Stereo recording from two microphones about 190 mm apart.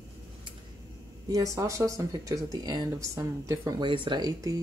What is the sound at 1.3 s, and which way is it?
Speech, 15° right (ahead or behind).